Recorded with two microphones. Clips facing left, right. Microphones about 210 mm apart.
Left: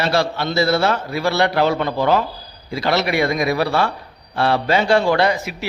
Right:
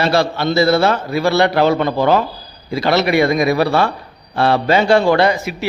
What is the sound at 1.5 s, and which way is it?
A man's voice, 60° right (ahead or behind).